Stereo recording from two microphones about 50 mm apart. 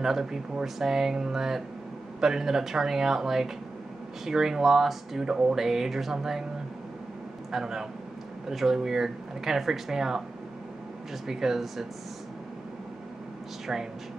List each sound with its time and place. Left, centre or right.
0.0 s speech: centre
7.5 s speech: centre
11.2 s speech: centre
13.7 s speech: centre